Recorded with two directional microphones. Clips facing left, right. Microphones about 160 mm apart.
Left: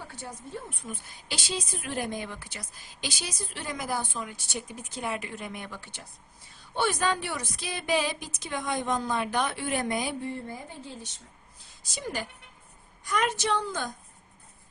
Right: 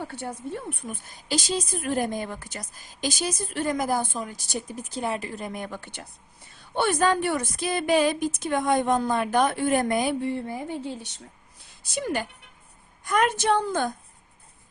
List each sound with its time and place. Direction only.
0.8 s a woman's voice: 50° right (ahead or behind)